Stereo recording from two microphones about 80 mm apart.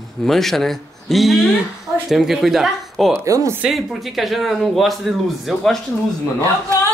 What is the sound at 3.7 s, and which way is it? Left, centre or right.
Speech, centre.